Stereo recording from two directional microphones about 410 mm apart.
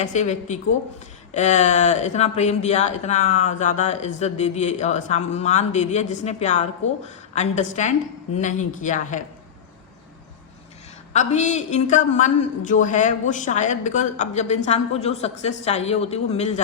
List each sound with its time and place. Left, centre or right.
0.0 s a woman's voice: centre
11.1 s a woman's voice: centre